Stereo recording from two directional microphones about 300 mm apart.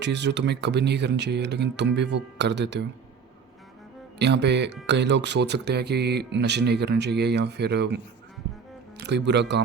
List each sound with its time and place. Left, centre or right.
0.0 s speech: right
4.2 s speech: right